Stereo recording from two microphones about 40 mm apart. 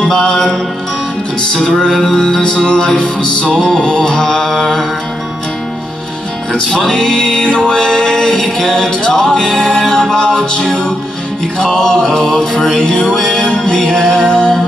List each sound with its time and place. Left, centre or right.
0.1 s music: centre
6.5 s music: centre